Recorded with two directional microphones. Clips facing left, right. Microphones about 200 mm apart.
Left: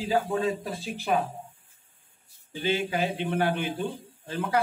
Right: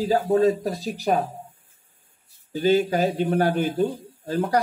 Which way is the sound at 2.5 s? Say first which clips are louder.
Right 8 dB; 40° right (ahead or behind).